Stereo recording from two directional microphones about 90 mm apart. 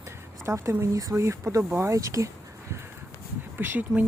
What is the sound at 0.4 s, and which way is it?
Speech, 35° right (ahead or behind).